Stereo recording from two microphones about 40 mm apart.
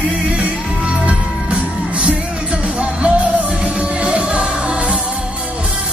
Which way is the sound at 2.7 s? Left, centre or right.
Right.